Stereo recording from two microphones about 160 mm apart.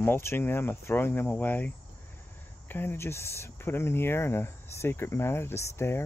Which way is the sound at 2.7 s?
15° left (ahead or behind).